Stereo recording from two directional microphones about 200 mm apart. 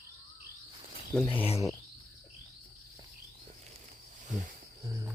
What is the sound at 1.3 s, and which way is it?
Speech, 30° left (ahead or behind).